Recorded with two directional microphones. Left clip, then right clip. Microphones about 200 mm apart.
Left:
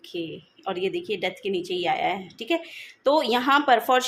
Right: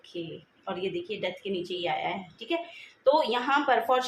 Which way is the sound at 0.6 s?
55° left (ahead or behind).